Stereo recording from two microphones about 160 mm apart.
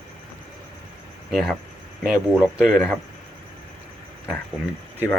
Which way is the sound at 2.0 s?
5° right (ahead or behind).